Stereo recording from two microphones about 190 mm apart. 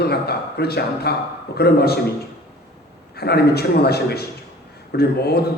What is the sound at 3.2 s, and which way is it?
A man's voice, 55° left (ahead or behind).